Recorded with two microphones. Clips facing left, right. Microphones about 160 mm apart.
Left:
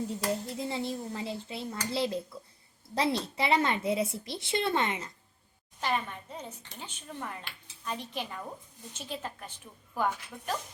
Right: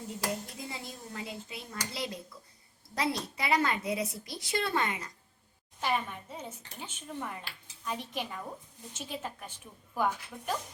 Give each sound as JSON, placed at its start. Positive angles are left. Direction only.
{"t": 0.4, "sound": "speech", "side_deg": 30}
{"t": 5.8, "sound": "speech", "side_deg": -10}